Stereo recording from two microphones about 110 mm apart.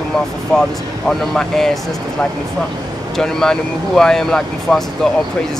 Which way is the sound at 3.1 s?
5° left (ahead or behind).